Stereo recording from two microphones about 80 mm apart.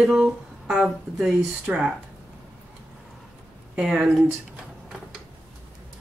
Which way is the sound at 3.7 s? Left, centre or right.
Centre.